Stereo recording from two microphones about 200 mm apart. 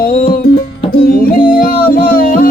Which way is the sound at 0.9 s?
45° left (ahead or behind).